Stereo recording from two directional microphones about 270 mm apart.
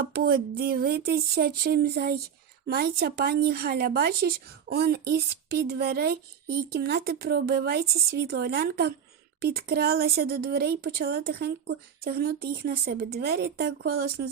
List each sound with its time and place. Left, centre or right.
0.0 s speech: right